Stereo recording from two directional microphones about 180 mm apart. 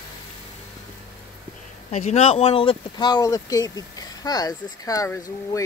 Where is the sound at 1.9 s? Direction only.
40° left (ahead or behind).